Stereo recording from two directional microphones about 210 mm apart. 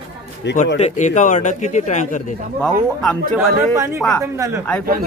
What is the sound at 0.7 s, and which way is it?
Speech, 35° left (ahead or behind).